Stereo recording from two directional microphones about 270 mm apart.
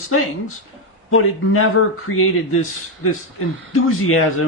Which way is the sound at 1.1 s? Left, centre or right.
Left.